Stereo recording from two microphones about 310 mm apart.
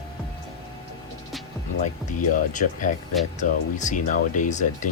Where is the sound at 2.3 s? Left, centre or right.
Left.